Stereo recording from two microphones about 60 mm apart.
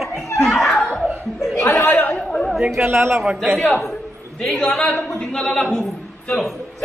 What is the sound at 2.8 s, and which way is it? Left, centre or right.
Speech, right.